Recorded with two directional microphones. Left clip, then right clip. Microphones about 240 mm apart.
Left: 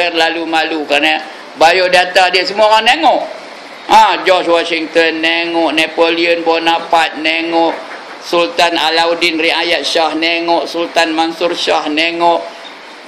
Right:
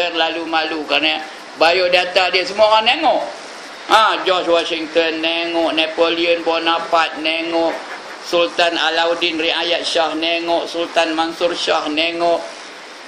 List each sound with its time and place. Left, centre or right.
0.0 s a man's voice: centre